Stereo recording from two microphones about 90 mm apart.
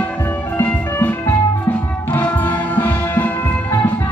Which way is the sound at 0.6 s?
20° left (ahead or behind).